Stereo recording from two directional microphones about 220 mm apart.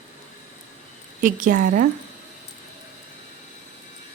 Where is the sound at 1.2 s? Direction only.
40° right (ahead or behind).